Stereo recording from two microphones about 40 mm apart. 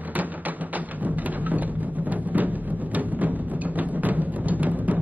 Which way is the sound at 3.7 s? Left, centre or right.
Right.